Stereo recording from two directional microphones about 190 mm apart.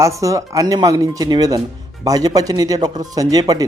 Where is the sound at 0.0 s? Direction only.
15° right (ahead or behind).